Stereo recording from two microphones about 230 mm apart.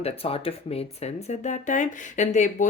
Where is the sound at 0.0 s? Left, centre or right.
Left.